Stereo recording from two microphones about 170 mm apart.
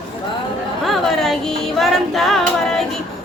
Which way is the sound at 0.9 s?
Centre (ahead or behind).